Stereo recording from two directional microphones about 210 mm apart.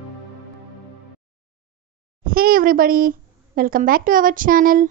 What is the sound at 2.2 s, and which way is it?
A child's voice, 45° right (ahead or behind).